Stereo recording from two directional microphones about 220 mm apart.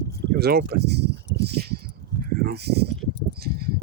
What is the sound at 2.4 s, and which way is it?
Speech, 45° right (ahead or behind).